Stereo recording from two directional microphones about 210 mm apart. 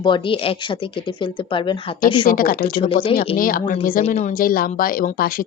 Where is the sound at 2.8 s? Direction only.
25° left (ahead or behind).